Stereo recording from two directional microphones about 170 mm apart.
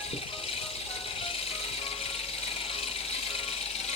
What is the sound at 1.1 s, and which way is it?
Music, 35° left (ahead or behind).